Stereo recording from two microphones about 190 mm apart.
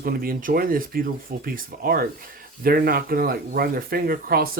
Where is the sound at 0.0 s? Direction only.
50° right (ahead or behind).